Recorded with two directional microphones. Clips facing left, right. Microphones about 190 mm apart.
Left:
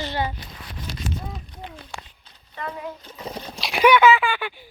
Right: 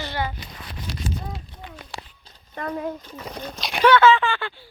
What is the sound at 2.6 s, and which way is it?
Speech, 45° right (ahead or behind).